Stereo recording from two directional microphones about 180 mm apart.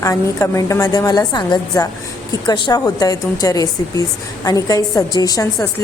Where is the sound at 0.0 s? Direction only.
15° left (ahead or behind).